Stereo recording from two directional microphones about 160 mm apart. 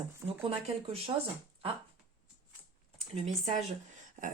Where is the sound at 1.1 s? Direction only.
25° right (ahead or behind).